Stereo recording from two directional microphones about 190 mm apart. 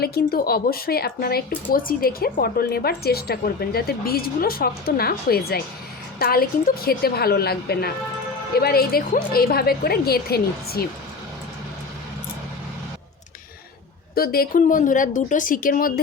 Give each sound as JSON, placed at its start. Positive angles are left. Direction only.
{"t": 0.0, "sound": "a woman's voice", "side_deg": 55}
{"t": 14.2, "sound": "a woman's voice", "side_deg": 50}